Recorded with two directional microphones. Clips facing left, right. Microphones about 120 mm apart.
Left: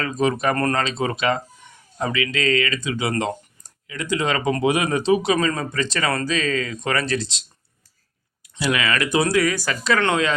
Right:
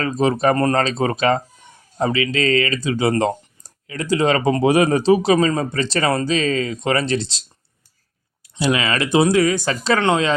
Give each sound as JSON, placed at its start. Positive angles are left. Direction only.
{"t": 0.0, "sound": "speech", "side_deg": -35}
{"t": 0.8, "sound": "speech", "side_deg": -40}
{"t": 8.5, "sound": "speech", "side_deg": -25}